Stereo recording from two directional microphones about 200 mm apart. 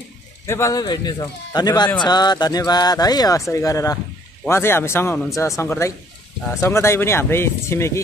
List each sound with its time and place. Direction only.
0.5 s speech: 15° left (ahead or behind)